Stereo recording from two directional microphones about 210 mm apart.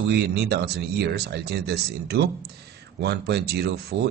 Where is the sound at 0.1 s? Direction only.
50° right (ahead or behind).